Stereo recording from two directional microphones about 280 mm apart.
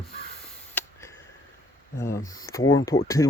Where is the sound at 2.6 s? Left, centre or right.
Left.